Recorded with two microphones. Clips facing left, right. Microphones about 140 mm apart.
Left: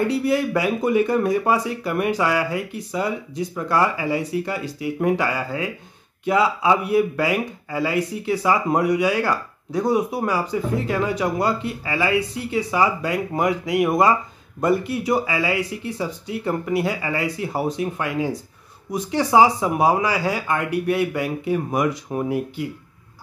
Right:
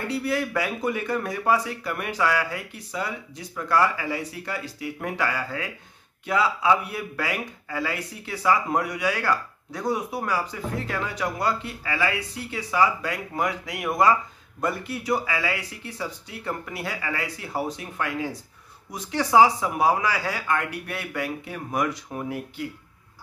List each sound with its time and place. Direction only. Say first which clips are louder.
0.1 s speech: left 6 dB; 20° left (ahead or behind)